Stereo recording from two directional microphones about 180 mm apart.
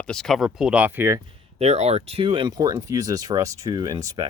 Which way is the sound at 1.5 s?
35° right (ahead or behind).